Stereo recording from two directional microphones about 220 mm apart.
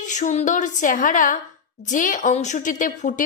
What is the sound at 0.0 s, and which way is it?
A woman's voice, 35° left (ahead or behind).